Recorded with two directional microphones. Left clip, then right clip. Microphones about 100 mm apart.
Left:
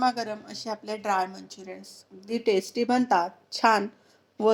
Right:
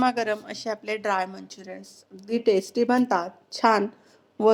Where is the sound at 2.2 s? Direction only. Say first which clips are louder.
Right 3 dB; centre (ahead or behind).